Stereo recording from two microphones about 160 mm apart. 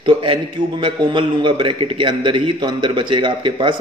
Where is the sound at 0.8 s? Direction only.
30° right (ahead or behind).